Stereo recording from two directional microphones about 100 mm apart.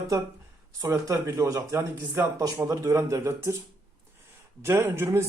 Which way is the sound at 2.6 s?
35° right (ahead or behind).